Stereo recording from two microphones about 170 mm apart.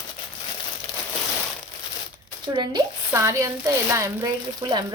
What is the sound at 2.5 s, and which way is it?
Speech, 25° right (ahead or behind).